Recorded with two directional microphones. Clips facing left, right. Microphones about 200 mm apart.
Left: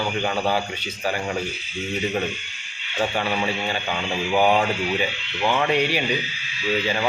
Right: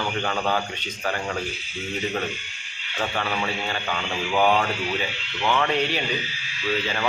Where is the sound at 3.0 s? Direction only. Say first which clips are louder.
Left 3 dB; 15° left (ahead or behind).